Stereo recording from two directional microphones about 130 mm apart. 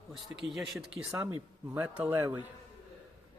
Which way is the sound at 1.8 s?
10° right (ahead or behind).